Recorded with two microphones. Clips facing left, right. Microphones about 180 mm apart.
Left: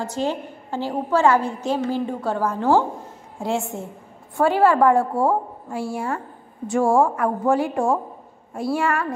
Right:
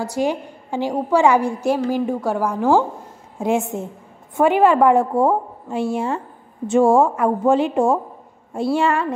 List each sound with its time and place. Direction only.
0.0 s a woman's voice: 10° right (ahead or behind)